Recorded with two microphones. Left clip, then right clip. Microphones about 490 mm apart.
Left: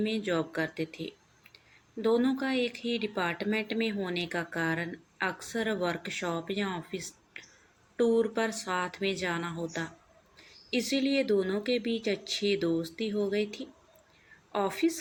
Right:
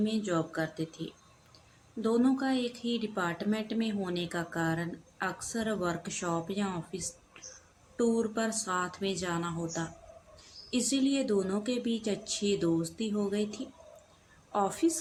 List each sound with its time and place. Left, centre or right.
0.0 s speech: right
2.0 s speech: right